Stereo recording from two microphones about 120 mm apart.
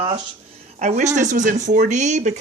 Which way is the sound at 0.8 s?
80° right.